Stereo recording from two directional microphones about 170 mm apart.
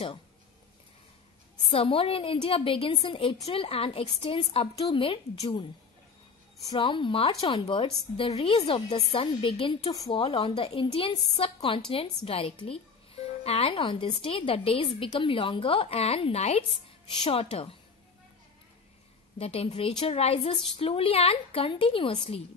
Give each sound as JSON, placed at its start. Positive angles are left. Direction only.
{"t": 1.6, "sound": "speech", "side_deg": 35}
{"t": 6.7, "sound": "speech", "side_deg": 30}
{"t": 19.3, "sound": "speech", "side_deg": 35}